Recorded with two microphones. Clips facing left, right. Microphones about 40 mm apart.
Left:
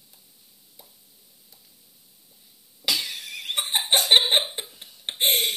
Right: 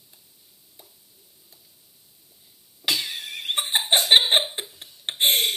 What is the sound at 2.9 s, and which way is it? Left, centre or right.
Laughter, right.